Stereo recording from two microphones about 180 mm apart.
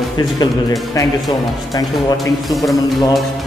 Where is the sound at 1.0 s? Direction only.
20° left (ahead or behind).